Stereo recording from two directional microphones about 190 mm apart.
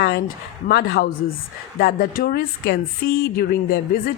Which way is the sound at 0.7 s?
55° left (ahead or behind).